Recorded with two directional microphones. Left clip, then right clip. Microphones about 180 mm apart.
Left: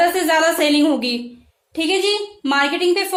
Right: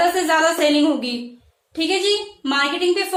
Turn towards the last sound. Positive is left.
turn(degrees=40)  # may be behind; listen again after turning